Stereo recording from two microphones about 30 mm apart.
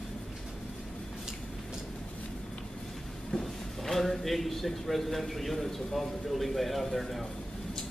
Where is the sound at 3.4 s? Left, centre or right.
Centre.